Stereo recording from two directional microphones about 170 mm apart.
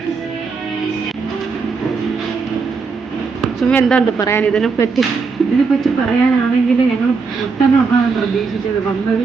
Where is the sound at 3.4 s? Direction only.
5° left (ahead or behind).